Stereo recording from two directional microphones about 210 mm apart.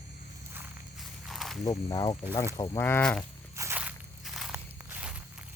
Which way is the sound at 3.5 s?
10° right (ahead or behind).